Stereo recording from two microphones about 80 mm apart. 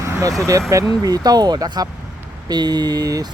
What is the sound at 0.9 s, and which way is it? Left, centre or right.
Speech, right.